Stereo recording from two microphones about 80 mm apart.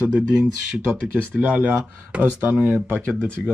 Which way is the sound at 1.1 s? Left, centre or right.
Centre.